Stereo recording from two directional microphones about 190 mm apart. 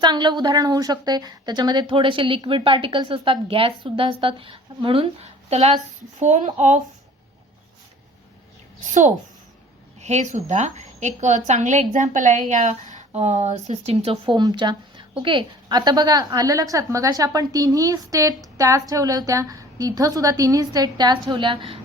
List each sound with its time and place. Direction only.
0.0 s a woman's voice: 25° right (ahead or behind)
8.8 s a woman's voice: 40° right (ahead or behind)